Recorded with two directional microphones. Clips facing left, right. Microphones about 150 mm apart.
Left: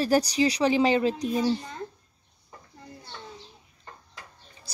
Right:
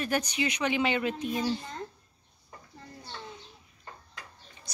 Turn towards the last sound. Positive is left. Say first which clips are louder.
# left 3 dB
turn(degrees=30)  # may be behind; listen again after turning